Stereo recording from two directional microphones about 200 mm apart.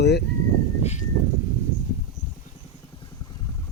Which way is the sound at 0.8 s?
35° left (ahead or behind).